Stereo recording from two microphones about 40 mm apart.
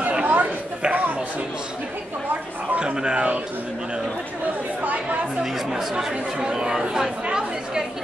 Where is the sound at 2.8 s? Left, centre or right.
Right.